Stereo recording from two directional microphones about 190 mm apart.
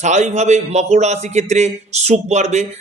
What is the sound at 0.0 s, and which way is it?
A man's voice, 35° right (ahead or behind).